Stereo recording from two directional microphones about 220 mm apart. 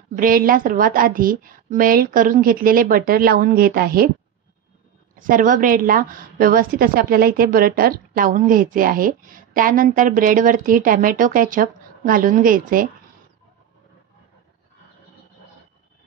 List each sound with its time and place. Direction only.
0.1 s a woman's voice: 40° right (ahead or behind)
5.2 s a woman's voice: 35° right (ahead or behind)